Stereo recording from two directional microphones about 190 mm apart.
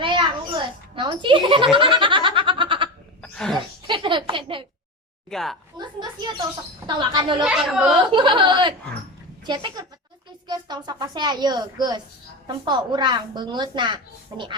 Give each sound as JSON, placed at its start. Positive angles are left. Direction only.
{"t": 0.0, "sound": "a sound", "side_deg": -25}
{"t": 3.3, "sound": "speech", "side_deg": 5}
{"t": 3.8, "sound": "a woman's voice", "side_deg": -25}
{"t": 5.3, "sound": "speech", "side_deg": 0}
{"t": 5.7, "sound": "speech", "side_deg": -20}
{"t": 7.4, "sound": "speech", "side_deg": -5}
{"t": 8.1, "sound": "speech", "side_deg": -25}